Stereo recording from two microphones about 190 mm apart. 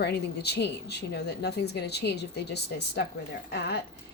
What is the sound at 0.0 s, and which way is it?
A woman's voice, 60° left (ahead or behind).